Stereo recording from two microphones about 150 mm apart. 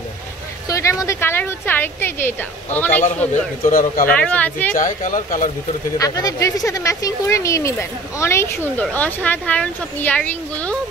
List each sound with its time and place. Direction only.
0.7 s speech: 20° left (ahead or behind)
3.6 s speech: 65° left (ahead or behind)
4.1 s speech: 10° left (ahead or behind)
4.7 s speech: 60° left (ahead or behind)
5.9 s speech: 20° left (ahead or behind)